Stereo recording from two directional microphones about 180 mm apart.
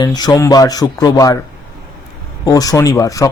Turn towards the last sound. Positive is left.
turn(degrees=20)  # may be behind; listen again after turning